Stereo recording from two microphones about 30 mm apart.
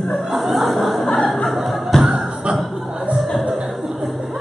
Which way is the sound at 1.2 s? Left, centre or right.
Centre.